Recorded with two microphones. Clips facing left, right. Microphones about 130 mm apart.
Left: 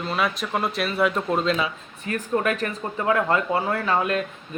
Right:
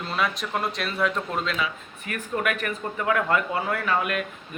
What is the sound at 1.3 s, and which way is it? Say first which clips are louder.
Speech: left 5 dB; 30° left (ahead or behind).